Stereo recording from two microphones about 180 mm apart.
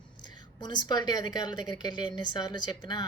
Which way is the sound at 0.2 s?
25° left (ahead or behind).